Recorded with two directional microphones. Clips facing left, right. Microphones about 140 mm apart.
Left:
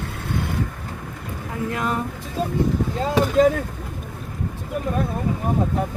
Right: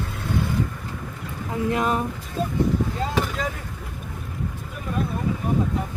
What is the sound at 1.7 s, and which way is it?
Speech, 20° right (ahead or behind).